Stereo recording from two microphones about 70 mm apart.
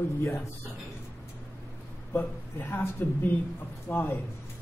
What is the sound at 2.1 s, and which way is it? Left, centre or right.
A man's voice, left.